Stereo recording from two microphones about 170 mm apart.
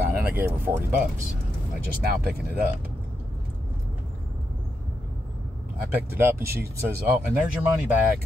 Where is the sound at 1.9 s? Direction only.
65° right (ahead or behind).